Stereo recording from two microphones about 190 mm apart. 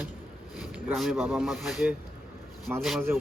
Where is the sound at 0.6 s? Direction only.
5° right (ahead or behind).